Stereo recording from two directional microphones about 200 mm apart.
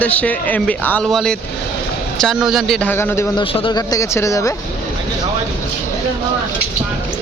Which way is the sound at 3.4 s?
25° left (ahead or behind).